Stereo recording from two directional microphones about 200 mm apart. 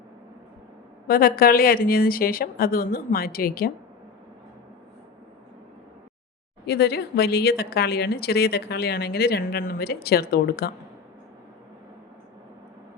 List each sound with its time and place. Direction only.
1.0 s a woman's voice: 50° left (ahead or behind)
6.7 s a woman's voice: 55° left (ahead or behind)